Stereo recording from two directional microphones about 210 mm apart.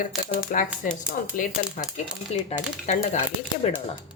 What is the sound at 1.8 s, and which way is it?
Speech, 40° left (ahead or behind).